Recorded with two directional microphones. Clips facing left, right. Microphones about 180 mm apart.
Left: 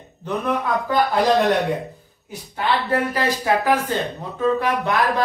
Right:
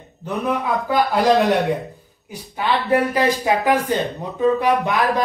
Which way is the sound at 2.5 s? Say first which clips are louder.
Right 2 dB; 15° right (ahead or behind).